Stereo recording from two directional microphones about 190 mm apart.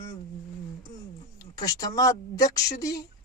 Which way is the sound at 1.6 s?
20° left (ahead or behind).